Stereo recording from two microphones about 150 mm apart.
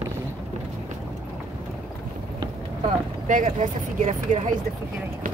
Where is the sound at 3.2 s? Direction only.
55° right (ahead or behind).